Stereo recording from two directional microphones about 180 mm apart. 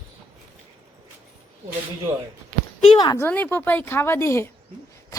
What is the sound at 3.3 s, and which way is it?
Speech, 10° left (ahead or behind).